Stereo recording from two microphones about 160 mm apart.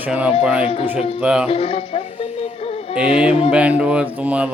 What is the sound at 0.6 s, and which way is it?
Speech, 35° left (ahead or behind).